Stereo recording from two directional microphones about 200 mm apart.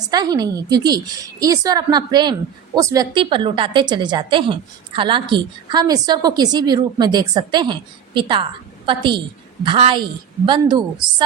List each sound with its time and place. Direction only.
0.1 s a woman's voice: 20° right (ahead or behind)